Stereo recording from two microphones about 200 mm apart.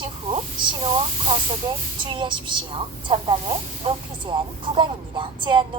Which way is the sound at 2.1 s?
25° right (ahead or behind).